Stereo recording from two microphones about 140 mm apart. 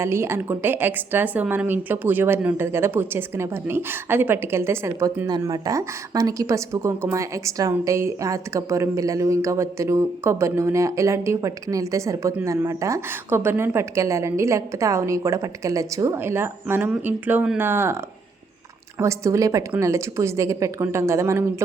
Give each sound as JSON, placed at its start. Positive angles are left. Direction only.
{"t": 0.0, "sound": "a woman's voice", "side_deg": -20}
{"t": 18.9, "sound": "a woman's voice", "side_deg": -20}